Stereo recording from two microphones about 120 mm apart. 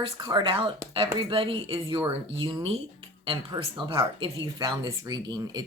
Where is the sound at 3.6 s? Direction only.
45° right (ahead or behind).